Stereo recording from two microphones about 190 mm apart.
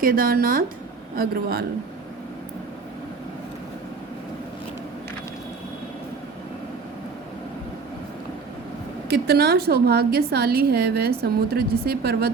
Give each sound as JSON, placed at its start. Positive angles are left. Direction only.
{"t": 0.0, "sound": "speech", "side_deg": -50}
{"t": 9.0, "sound": "a woman's voice", "side_deg": -55}